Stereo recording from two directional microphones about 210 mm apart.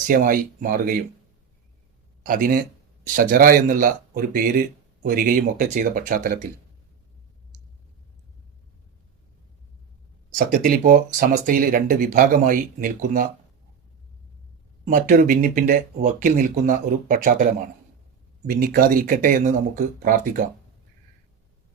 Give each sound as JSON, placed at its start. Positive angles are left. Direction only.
{"t": 0.1, "sound": "speech", "side_deg": -40}
{"t": 2.2, "sound": "speech", "side_deg": -40}
{"t": 10.3, "sound": "speech", "side_deg": -40}
{"t": 14.8, "sound": "speech", "side_deg": -40}
{"t": 18.4, "sound": "speech", "side_deg": -45}